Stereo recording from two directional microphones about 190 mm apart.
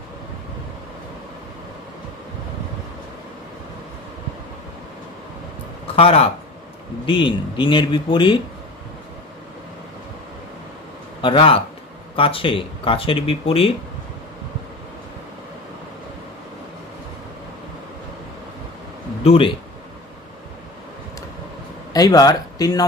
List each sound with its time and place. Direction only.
5.9 s a man's voice: 30° left (ahead or behind)
11.1 s a man's voice: 25° left (ahead or behind)
19.2 s speech: 30° left (ahead or behind)
21.9 s speech: 20° left (ahead or behind)